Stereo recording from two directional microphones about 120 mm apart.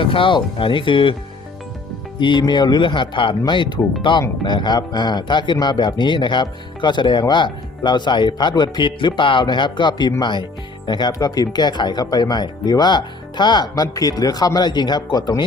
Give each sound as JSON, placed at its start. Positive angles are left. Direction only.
{"t": 0.0, "sound": "speech", "side_deg": 45}
{"t": 2.1, "sound": "speech", "side_deg": 40}